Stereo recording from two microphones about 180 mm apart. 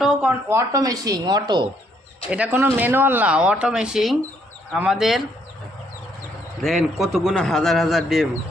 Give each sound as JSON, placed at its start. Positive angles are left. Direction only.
{"t": 0.0, "sound": "speech", "side_deg": -5}
{"t": 0.7, "sound": "a woman's voice", "side_deg": -20}
{"t": 2.3, "sound": "a man's voice", "side_deg": -10}
{"t": 6.6, "sound": "a man's voice", "side_deg": 0}